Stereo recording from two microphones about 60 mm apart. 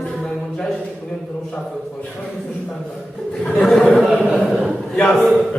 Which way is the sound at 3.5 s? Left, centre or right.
Centre.